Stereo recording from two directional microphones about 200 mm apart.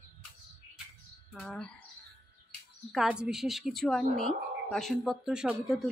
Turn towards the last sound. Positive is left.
turn(degrees=-5)  # may be behind; listen again after turning